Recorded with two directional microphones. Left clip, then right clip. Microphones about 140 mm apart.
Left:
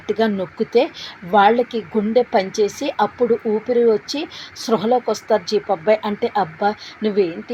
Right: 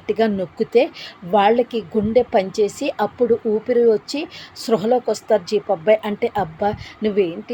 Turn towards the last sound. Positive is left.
turn(degrees=-15)  # may be behind; listen again after turning